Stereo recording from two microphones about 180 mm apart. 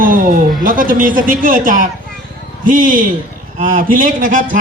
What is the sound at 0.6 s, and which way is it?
A man's voice, 50° right (ahead or behind).